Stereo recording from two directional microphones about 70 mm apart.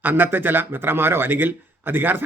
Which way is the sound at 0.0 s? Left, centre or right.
Right.